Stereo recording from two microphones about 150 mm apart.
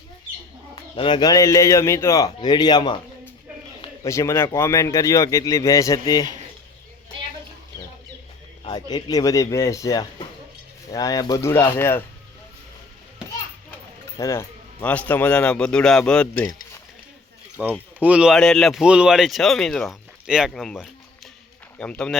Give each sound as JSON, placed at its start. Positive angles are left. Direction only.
{"t": 0.9, "sound": "speech", "side_deg": 35}
{"t": 4.0, "sound": "speech", "side_deg": 20}
{"t": 8.6, "sound": "speech", "side_deg": 30}
{"t": 14.2, "sound": "speech", "side_deg": 20}
{"t": 14.8, "sound": "speech", "side_deg": 10}
{"t": 17.6, "sound": "speech", "side_deg": -10}